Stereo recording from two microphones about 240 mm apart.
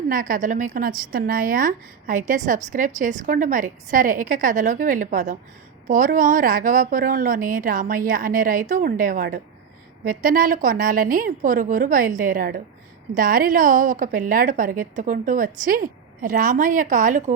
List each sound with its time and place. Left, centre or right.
0.1 s a woman's voice: right